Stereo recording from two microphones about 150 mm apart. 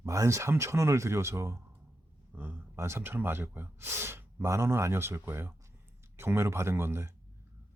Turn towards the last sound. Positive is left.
turn(degrees=-15)  # may be behind; listen again after turning